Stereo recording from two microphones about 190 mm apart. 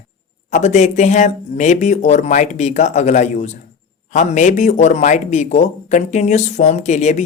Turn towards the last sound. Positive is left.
turn(degrees=40)  # may be behind; listen again after turning